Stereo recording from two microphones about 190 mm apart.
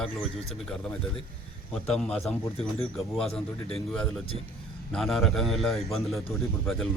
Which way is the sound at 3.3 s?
30° left (ahead or behind).